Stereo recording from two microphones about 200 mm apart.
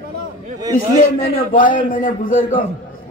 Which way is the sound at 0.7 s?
45° left (ahead or behind).